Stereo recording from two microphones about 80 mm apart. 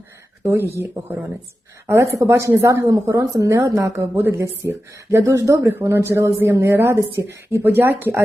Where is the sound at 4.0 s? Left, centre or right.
Right.